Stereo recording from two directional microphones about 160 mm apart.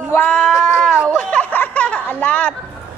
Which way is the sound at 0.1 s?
10° left (ahead or behind).